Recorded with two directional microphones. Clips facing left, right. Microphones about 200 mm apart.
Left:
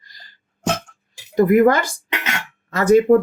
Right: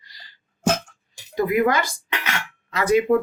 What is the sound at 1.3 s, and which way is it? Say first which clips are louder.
Speech: left 6 dB; 50° left (ahead or behind).